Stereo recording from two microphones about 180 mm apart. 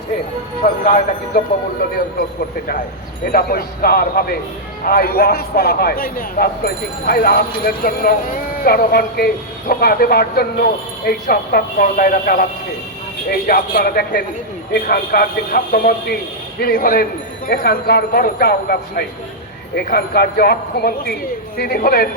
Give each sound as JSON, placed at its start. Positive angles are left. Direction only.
{"t": 0.6, "sound": "speech", "side_deg": 45}
{"t": 3.3, "sound": "a man's voice", "side_deg": 55}